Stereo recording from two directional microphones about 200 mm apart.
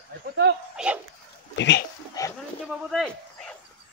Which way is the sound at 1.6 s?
60° left (ahead or behind).